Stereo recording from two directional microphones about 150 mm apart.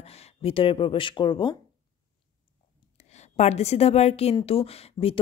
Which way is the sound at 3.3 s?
45° left (ahead or behind).